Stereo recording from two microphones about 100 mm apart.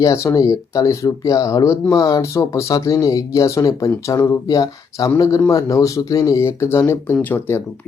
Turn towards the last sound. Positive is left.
turn(degrees=20)  # may be behind; listen again after turning